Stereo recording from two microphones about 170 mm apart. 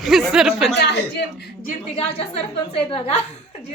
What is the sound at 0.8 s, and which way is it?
Speech, 80° left.